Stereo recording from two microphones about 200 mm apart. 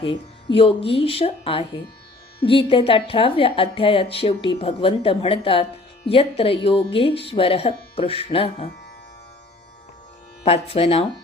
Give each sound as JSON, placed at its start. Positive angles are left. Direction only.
{"t": 0.0, "sound": "speech", "side_deg": 25}
{"t": 10.4, "sound": "speech", "side_deg": 30}